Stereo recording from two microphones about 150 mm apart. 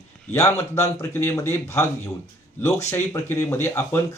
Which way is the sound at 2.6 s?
20° left (ahead or behind).